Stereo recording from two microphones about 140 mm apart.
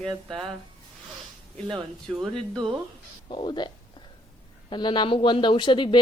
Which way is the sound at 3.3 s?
30° left (ahead or behind).